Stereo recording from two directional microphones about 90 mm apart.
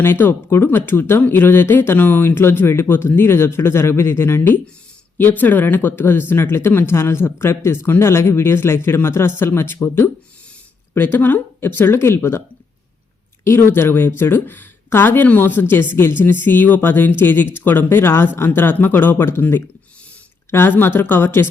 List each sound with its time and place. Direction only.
0.0 s speech: 25° left (ahead or behind)
13.4 s speech: 25° left (ahead or behind)